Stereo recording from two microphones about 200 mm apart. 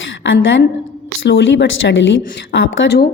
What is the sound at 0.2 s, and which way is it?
Speech, 65° left (ahead or behind).